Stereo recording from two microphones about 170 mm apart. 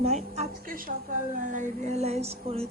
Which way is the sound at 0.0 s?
40° right (ahead or behind).